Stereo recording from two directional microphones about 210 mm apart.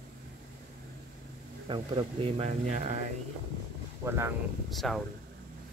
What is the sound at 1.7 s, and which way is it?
Speech, 25° right (ahead or behind).